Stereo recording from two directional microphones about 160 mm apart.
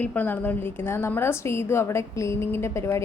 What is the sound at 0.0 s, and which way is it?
A woman's voice, 10° left (ahead or behind).